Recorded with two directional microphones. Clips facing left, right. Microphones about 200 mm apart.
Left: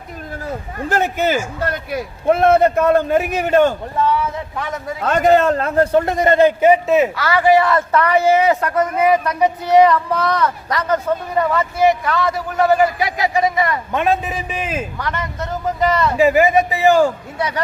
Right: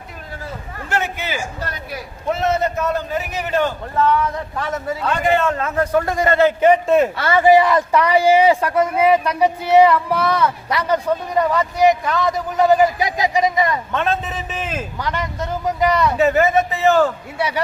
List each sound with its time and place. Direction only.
0.8 s a man's voice: 35° left (ahead or behind)
3.9 s a man's voice: 10° left (ahead or behind)
4.9 s a man's voice: 45° left (ahead or behind); by 7.1 s 5° left (ahead or behind)
7.2 s a man's voice: 25° right (ahead or behind)
13.9 s a man's voice: 15° left (ahead or behind)
14.9 s a man's voice: 15° right (ahead or behind)
16.1 s a man's voice: 10° left (ahead or behind)
17.3 s a man's voice: 10° right (ahead or behind)